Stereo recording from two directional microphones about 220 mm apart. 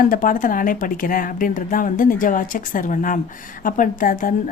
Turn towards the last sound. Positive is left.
turn(degrees=40)  # may be behind; listen again after turning